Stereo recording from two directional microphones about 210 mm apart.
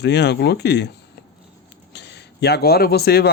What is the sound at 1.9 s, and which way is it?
Speech, 55° left (ahead or behind).